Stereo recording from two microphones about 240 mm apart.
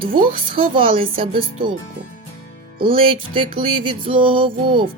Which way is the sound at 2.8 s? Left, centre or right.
Right.